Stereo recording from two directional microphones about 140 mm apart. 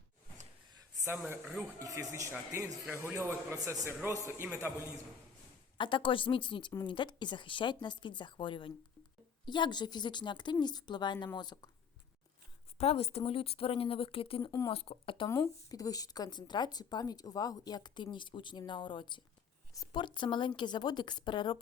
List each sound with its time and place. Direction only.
1.8 s a man's voice: 25° right (ahead or behind)
5.7 s speech: 35° left (ahead or behind)
12.8 s speech: 45° left (ahead or behind)
15.3 s speech: 25° left (ahead or behind)